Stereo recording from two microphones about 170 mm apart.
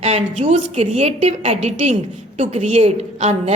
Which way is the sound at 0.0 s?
40° right (ahead or behind).